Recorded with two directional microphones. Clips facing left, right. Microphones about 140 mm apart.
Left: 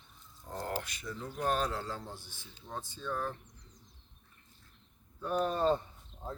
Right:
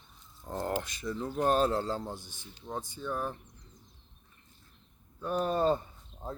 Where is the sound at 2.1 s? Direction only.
15° right (ahead or behind).